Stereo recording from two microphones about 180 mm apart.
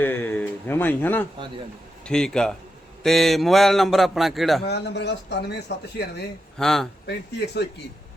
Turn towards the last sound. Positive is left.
turn(degrees=70)  # may be behind; listen again after turning